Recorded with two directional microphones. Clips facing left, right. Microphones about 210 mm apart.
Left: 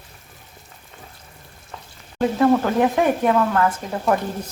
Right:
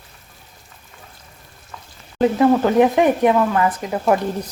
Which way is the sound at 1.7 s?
30° left (ahead or behind).